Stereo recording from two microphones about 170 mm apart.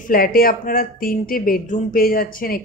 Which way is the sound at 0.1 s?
60° left (ahead or behind).